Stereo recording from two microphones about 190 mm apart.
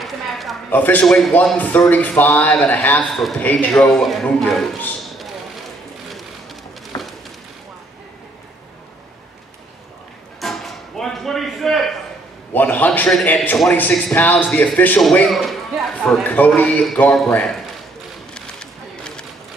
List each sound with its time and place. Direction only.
0.0 s a man's voice: centre (ahead or behind)
6.0 s pigeon: centre (ahead or behind)
6.9 s a sound: 20° left (ahead or behind)
10.4 s music: centre (ahead or behind)
12.5 s a man's voice: 10° left (ahead or behind)
18.3 s a sound: 5° left (ahead or behind)